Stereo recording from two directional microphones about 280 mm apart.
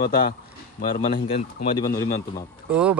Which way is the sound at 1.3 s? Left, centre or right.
Centre.